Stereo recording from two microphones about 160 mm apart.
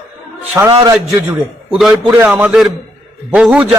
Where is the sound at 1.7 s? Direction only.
5° right (ahead or behind).